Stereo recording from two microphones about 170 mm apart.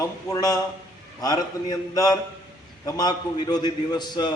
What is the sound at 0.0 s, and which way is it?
A man's voice, 20° left (ahead or behind).